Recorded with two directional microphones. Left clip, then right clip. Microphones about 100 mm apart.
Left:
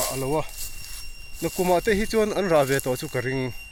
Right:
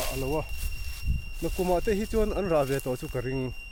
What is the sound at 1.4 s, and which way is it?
Speech, 65° left (ahead or behind).